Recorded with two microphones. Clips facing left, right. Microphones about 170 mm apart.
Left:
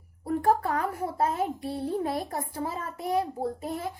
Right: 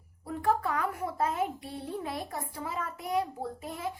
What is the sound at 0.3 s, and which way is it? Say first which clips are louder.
A woman's voice: left 4 dB; 40° left (ahead or behind).